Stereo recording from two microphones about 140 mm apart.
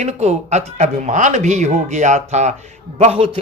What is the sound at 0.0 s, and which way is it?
Speech, 50° right (ahead or behind).